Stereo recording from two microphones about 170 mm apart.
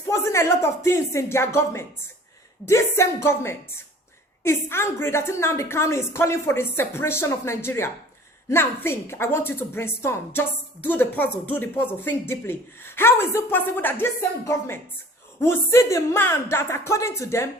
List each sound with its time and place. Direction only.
0.1 s a woman's voice: 15° left (ahead or behind)